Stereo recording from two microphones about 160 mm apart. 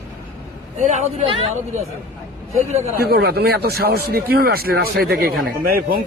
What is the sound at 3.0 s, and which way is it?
Speech, 80° right.